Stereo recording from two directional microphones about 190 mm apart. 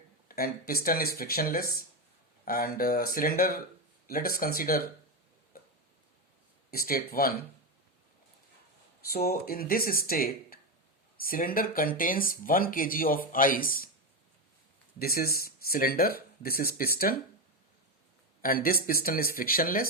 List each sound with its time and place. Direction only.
0.3 s speech: 50° left (ahead or behind)
6.7 s speech: 50° left (ahead or behind)
9.1 s speech: 55° left (ahead or behind)
14.9 s speech: 50° left (ahead or behind)
18.4 s speech: 50° left (ahead or behind)